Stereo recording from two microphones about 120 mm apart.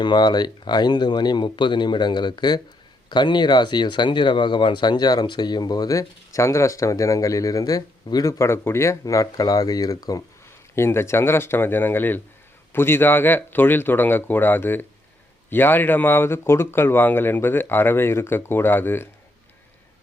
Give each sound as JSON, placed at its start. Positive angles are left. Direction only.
{"t": 0.0, "sound": "speech", "side_deg": 40}